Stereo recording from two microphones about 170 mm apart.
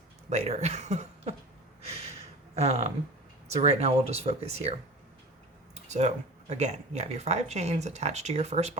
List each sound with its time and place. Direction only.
0.3 s speech: 40° right (ahead or behind)
2.6 s speech: 40° right (ahead or behind)